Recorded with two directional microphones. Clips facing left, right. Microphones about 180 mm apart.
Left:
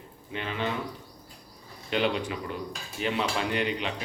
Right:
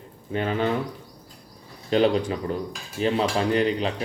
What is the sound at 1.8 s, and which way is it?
Speech, 35° right (ahead or behind).